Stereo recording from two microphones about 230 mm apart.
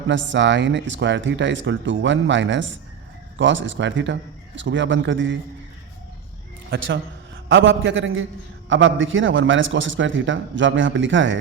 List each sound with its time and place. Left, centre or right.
0.1 s speech: right
6.7 s a man's voice: right